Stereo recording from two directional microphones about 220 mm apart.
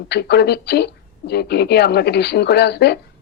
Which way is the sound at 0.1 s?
50° left (ahead or behind).